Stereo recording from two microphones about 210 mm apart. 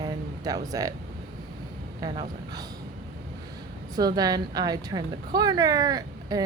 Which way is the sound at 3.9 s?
20° right (ahead or behind).